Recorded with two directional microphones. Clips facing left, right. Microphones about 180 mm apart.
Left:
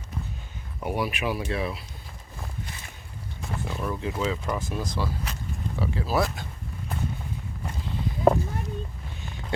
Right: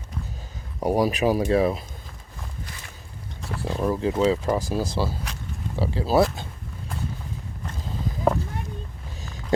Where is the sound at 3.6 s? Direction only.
35° right (ahead or behind).